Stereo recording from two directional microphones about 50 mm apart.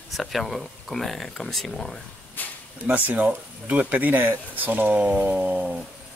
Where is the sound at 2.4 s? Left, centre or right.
Left.